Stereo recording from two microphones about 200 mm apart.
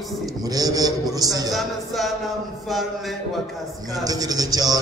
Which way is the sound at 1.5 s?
Centre (ahead or behind).